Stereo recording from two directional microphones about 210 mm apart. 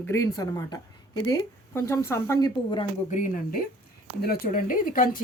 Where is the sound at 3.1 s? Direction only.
35° left (ahead or behind).